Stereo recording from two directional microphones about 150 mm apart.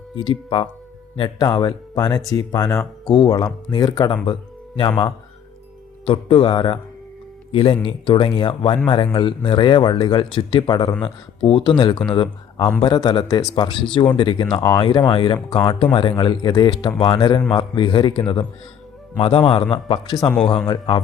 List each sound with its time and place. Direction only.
0.2 s speech: 35° left (ahead or behind)